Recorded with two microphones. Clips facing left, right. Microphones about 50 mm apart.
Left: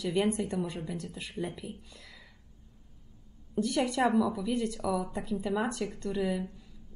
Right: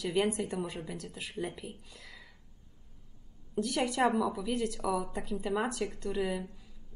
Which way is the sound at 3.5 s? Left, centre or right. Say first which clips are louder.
Left 2 dB; centre.